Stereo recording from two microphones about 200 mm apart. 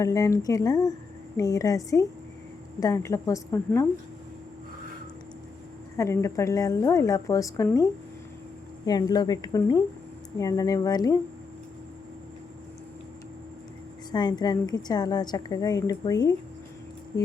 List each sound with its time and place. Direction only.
0.0 s a woman's voice: 15° left (ahead or behind)
6.0 s a woman's voice: 15° left (ahead or behind)
8.9 s a woman's voice: 20° left (ahead or behind)
14.1 s a woman's voice: 20° left (ahead or behind)